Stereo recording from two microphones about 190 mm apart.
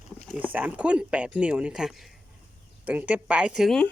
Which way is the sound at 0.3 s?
10° right (ahead or behind).